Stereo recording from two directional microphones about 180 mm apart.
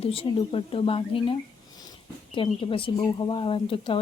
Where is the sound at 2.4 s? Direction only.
30° left (ahead or behind).